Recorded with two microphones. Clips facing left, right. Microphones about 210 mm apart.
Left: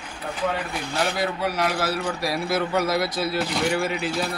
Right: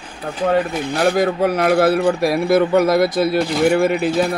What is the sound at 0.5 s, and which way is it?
A man's voice, 45° right (ahead or behind).